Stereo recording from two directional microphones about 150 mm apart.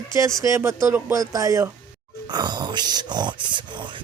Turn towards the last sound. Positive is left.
turn(degrees=-30)  # may be behind; listen again after turning